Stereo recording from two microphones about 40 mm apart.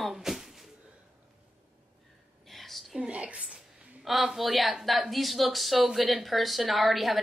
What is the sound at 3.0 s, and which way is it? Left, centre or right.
Speech, right.